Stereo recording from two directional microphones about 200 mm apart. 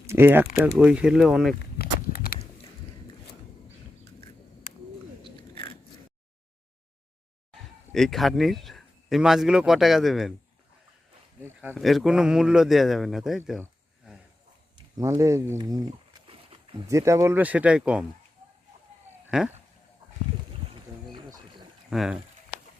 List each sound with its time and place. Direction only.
0.1 s a man's voice: 10° right (ahead or behind)
1.8 s a sound: 50° left (ahead or behind)
5.2 s biting: 25° left (ahead or behind)
7.5 s speech: centre (ahead or behind)
11.7 s a man's voice: centre (ahead or behind)
14.8 s speech: 15° right (ahead or behind)
19.3 s a man's voice: 5° right (ahead or behind)
21.1 s a sound: 25° right (ahead or behind)
21.8 s speech: centre (ahead or behind)